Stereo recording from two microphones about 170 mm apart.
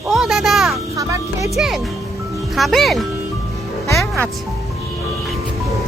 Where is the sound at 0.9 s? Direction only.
20° right (ahead or behind).